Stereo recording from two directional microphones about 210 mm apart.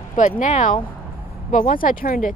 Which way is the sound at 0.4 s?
35° left (ahead or behind).